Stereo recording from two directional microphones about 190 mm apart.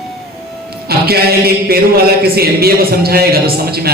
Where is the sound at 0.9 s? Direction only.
55° right (ahead or behind).